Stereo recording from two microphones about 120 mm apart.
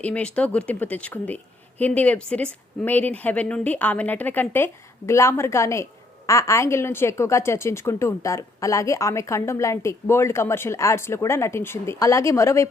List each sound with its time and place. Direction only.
0.0 s a woman's voice: 10° left (ahead or behind)